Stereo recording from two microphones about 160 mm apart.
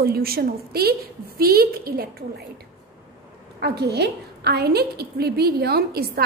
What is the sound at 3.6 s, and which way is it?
A woman's voice, 90° right.